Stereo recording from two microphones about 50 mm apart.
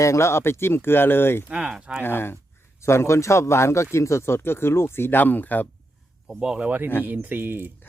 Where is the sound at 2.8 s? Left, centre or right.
Left.